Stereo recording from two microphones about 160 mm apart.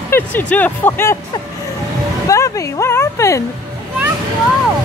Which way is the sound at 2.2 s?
20° left (ahead or behind).